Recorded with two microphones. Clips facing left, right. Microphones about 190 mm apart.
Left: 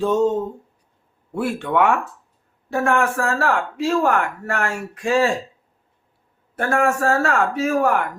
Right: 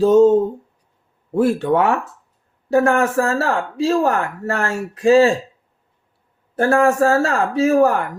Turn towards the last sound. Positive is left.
turn(degrees=-35)  # may be behind; listen again after turning